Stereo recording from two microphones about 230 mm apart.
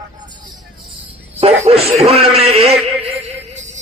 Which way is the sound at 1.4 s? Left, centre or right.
Right.